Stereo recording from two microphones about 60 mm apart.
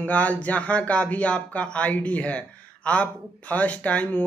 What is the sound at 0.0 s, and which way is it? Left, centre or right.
Speech, left.